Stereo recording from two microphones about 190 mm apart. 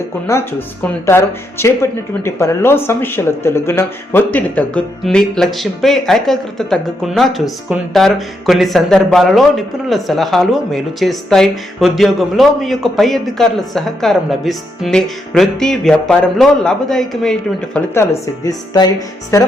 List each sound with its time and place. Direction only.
0.3 s speech: 10° left (ahead or behind)
17.7 s speech: 15° left (ahead or behind)